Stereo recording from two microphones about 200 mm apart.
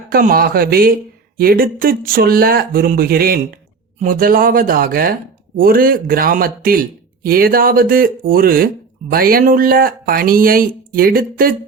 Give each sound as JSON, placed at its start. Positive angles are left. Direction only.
{"t": 0.1, "sound": "speech", "side_deg": -45}